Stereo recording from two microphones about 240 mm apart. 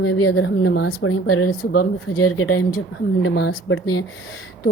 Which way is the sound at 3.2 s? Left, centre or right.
Left.